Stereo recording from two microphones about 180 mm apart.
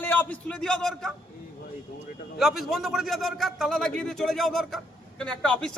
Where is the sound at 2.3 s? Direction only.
Centre (ahead or behind).